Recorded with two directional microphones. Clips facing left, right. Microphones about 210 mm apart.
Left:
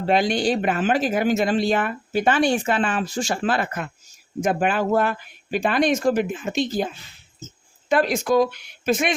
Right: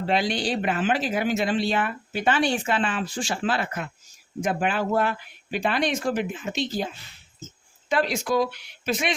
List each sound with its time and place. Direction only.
0.0 s speech: 45° left (ahead or behind)
7.9 s speech: 50° left (ahead or behind)